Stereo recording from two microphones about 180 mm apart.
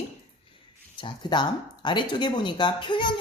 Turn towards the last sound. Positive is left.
turn(degrees=25)  # may be behind; listen again after turning